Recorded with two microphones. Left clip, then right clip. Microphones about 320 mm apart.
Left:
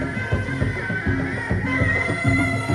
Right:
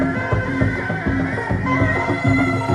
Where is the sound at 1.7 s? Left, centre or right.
Right.